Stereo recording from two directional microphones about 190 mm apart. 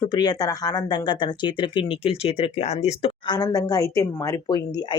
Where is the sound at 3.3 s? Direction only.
20° left (ahead or behind).